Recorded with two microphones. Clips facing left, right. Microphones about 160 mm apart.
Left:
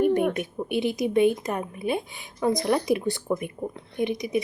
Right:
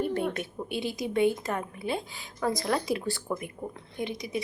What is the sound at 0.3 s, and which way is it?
A woman's voice, 20° left (ahead or behind).